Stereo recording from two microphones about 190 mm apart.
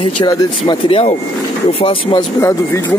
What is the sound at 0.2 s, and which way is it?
Speech, 25° left (ahead or behind).